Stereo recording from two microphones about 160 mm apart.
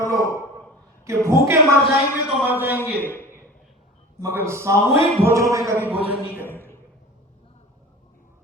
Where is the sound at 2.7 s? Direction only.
15° left (ahead or behind).